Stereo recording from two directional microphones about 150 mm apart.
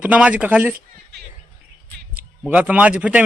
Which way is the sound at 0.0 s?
10° right (ahead or behind).